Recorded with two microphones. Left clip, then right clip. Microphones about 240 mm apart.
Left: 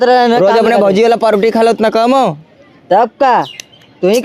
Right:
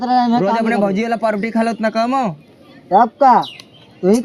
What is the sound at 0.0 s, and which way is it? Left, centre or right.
Speech, left.